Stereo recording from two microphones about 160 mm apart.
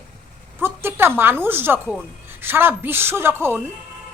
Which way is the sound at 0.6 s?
15° right (ahead or behind).